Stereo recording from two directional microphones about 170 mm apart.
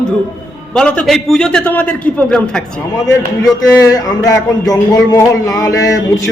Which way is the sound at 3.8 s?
20° left (ahead or behind).